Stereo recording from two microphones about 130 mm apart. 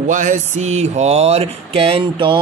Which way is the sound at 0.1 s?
75° right (ahead or behind).